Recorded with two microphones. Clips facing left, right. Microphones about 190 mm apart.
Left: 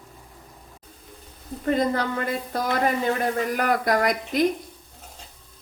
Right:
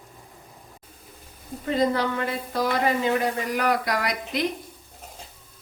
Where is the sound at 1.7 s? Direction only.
50° left (ahead or behind).